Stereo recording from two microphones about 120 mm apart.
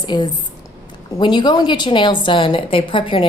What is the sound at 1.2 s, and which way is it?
A woman's voice, 40° left (ahead or behind).